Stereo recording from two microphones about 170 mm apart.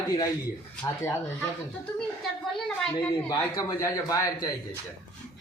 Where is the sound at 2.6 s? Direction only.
5° left (ahead or behind).